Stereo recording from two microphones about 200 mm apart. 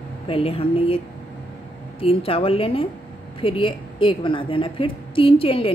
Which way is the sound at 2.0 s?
30° left (ahead or behind).